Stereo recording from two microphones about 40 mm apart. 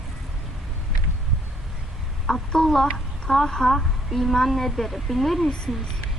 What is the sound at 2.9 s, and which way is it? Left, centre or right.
A woman's voice, centre.